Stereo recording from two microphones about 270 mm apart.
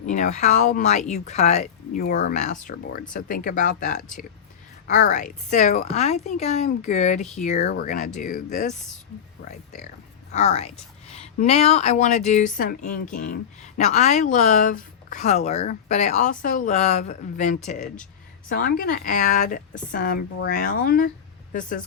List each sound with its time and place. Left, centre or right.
0.0 s speech: left